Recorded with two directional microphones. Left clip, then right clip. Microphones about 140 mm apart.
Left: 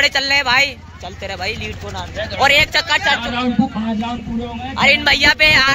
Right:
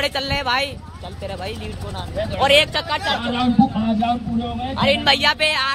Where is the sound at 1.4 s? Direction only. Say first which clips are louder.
Left 6 dB; 10° left (ahead or behind).